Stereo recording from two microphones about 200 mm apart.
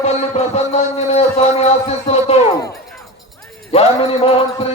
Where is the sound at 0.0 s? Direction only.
30° left (ahead or behind).